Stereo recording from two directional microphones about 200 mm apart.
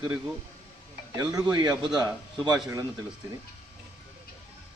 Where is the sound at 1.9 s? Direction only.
Centre (ahead or behind).